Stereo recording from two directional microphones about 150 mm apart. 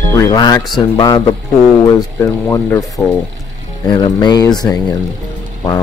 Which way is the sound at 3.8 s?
30° left (ahead or behind).